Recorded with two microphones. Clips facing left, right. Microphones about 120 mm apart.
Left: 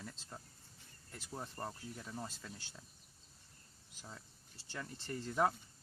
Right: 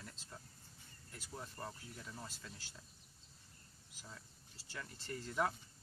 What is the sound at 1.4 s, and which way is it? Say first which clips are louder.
Speech: left 4 dB; 35° left (ahead or behind).